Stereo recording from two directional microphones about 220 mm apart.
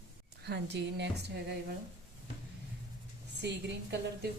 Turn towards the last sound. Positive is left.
turn(degrees=-50)  # may be behind; listen again after turning